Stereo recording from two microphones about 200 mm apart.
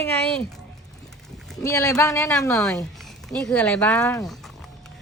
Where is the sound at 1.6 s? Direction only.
15° left (ahead or behind).